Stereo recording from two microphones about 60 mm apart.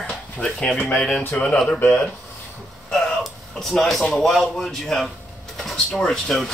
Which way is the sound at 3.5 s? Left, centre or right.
Centre.